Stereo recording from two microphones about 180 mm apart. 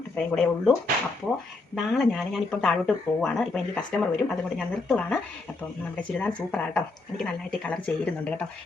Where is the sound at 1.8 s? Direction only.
Centre (ahead or behind).